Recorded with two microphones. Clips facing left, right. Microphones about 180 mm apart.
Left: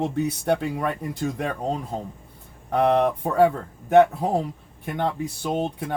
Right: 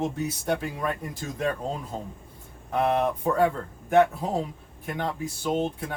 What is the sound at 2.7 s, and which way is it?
Speech, 65° left (ahead or behind).